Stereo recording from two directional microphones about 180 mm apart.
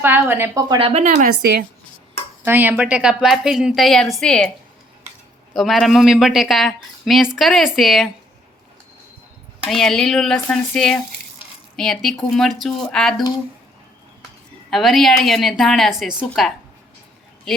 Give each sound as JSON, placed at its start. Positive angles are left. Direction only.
{"t": 0.0, "sound": "speech", "side_deg": -10}
{"t": 0.8, "sound": "speech", "side_deg": -35}
{"t": 2.4, "sound": "a woman's voice", "side_deg": -10}
{"t": 5.5, "sound": "a woman's voice", "side_deg": 0}
{"t": 9.6, "sound": "a woman's voice", "side_deg": 0}
{"t": 14.7, "sound": "a woman's voice", "side_deg": 0}